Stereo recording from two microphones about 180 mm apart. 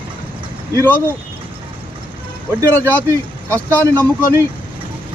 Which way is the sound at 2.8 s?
15° right (ahead or behind).